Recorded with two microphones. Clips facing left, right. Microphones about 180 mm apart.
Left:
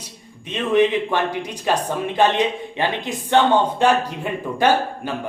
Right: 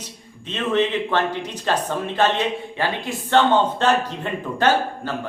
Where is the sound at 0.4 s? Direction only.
15° left (ahead or behind).